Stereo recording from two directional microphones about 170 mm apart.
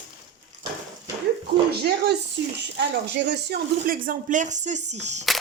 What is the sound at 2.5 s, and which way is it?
Speech, 90° right.